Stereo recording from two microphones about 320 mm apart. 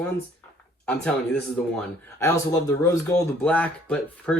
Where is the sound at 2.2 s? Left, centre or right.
Centre.